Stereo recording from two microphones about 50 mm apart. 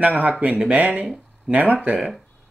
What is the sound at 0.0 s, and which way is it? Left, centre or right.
Speech, right.